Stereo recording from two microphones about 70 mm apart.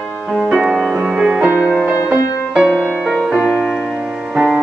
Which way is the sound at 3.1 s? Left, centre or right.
Centre.